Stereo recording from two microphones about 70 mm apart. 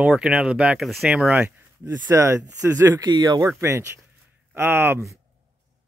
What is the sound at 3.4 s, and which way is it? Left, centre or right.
Speech, right.